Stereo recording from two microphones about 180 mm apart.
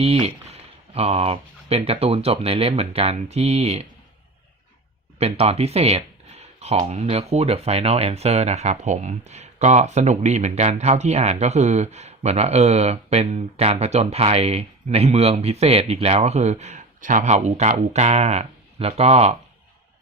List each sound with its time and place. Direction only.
0.0 s speech: 35° right (ahead or behind)
5.2 s speech: 35° right (ahead or behind)